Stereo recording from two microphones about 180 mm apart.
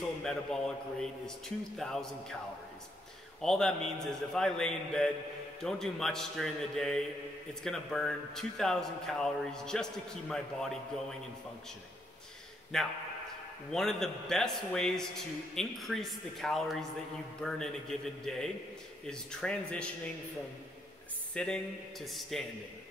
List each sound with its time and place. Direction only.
0.2 s a man's voice: 5° left (ahead or behind)
3.3 s a man's voice: 5° left (ahead or behind)
12.7 s a man's voice: 5° left (ahead or behind)
21.3 s a man's voice: 5° left (ahead or behind)